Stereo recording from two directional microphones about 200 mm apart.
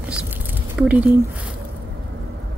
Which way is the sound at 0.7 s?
5° right (ahead or behind).